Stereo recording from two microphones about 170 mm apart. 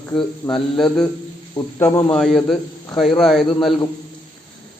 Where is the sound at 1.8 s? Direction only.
10° left (ahead or behind).